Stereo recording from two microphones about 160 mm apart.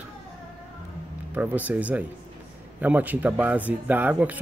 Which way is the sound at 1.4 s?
10° right (ahead or behind).